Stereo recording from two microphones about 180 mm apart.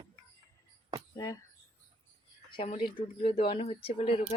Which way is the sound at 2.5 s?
30° left (ahead or behind).